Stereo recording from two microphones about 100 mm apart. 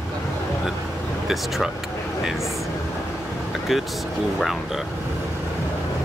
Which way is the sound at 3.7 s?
Centre (ahead or behind).